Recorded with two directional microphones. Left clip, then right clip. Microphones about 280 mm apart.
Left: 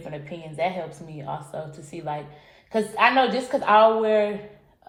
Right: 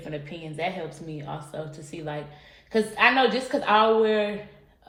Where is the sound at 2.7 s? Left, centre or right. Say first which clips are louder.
Left 1 dB; centre.